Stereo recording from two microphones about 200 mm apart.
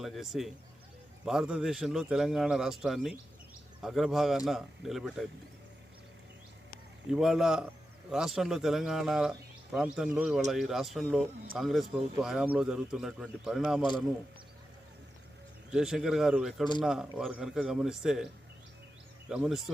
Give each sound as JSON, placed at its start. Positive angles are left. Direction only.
{"t": 0.0, "sound": "a man's voice", "side_deg": 0}
{"t": 7.1, "sound": "a man's voice", "side_deg": 0}
{"t": 15.7, "sound": "a man's voice", "side_deg": 0}
{"t": 19.3, "sound": "a man's voice", "side_deg": 0}